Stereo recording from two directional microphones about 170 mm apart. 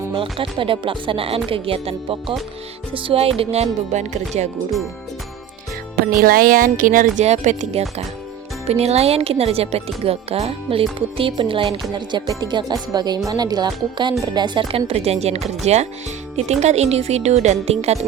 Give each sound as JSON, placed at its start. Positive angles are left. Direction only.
{"t": 0.1, "sound": "speech", "side_deg": -30}
{"t": 6.1, "sound": "speech", "side_deg": -55}